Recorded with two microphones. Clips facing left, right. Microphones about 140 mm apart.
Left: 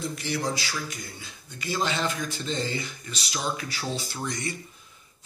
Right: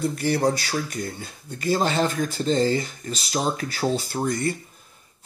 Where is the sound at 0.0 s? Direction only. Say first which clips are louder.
Right 8 dB; 50° right (ahead or behind).